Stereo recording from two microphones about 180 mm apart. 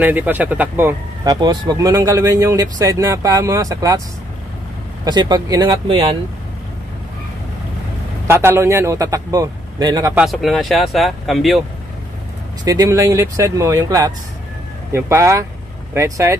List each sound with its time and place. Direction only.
0.0 s a man's voice: 10° right (ahead or behind)
1.2 s speech: 20° right (ahead or behind)
5.0 s speech: 25° right (ahead or behind)
8.3 s a man's voice: 15° right (ahead or behind)
10.1 s speech: centre (ahead or behind)
12.6 s a man's voice: 20° right (ahead or behind)